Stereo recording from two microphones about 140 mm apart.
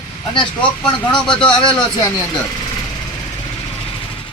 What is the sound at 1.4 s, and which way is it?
Speech, 30° left (ahead or behind).